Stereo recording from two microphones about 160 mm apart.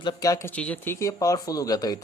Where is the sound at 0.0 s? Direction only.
25° left (ahead or behind).